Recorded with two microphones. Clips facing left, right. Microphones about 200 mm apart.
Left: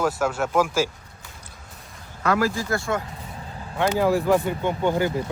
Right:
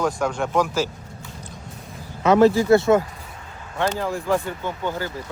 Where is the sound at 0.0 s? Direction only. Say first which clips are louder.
Even; 5° left (ahead or behind).